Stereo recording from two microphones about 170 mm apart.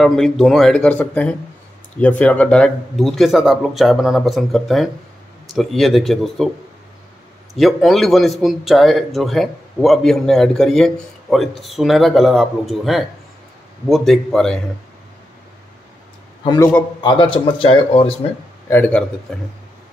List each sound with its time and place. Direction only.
0.0 s speech: centre (ahead or behind)
7.5 s speech: centre (ahead or behind)
16.4 s a man's voice: 15° left (ahead or behind)
17.0 s speech: 30° left (ahead or behind)
18.7 s a man's voice: 10° left (ahead or behind)